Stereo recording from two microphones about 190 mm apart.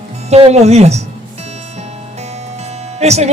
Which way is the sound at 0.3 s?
35° right (ahead or behind).